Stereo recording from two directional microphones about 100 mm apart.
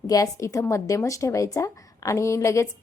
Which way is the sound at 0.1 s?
35° left (ahead or behind).